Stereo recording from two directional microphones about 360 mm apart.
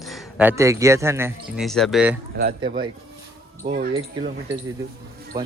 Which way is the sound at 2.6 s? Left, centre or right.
Right.